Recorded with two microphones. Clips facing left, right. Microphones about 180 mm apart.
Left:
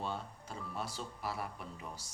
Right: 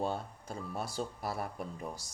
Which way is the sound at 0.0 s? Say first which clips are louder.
Right 5 dB; 45° right (ahead or behind).